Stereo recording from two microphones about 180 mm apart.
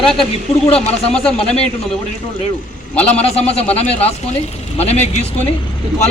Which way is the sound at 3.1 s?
35° left (ahead or behind).